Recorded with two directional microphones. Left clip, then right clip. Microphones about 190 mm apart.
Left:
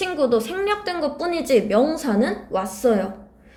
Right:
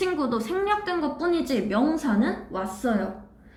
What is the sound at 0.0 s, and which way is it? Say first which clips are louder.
A woman's voice: left 6 dB; 15° left (ahead or behind).